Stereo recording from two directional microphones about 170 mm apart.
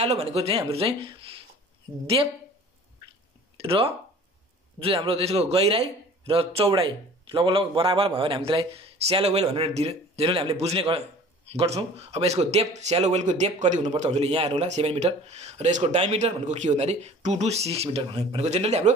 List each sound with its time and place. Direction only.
0.0 s speech: 40° right (ahead or behind)
3.5 s speech: 35° right (ahead or behind)